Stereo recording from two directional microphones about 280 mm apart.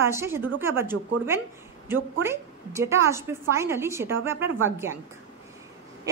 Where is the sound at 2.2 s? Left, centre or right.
Centre.